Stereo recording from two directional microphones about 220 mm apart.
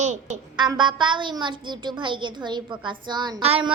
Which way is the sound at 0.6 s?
20° right (ahead or behind).